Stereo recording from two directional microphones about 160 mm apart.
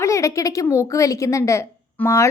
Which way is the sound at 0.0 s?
20° left (ahead or behind).